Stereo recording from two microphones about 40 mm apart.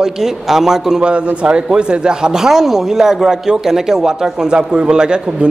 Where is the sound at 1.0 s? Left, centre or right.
Right.